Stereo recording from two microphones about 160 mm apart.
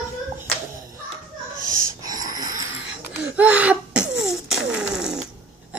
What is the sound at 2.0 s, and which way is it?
Wheeze, 25° right (ahead or behind).